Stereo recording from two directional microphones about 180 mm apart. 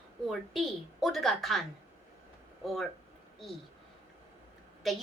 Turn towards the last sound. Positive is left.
turn(degrees=0)  # may be behind; listen again after turning